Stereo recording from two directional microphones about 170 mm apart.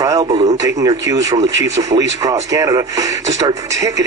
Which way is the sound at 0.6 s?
20° right (ahead or behind).